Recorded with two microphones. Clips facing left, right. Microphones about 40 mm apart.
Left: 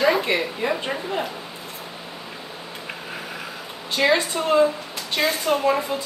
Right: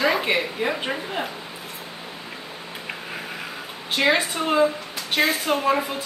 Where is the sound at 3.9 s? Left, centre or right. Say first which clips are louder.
Left 1 dB; right.